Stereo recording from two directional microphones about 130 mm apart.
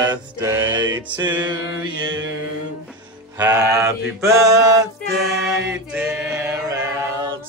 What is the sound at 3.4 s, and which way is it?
Mantra, 25° right (ahead or behind).